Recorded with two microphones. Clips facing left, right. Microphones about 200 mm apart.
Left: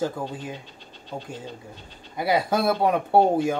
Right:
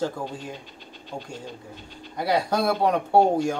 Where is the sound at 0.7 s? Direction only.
15° right (ahead or behind).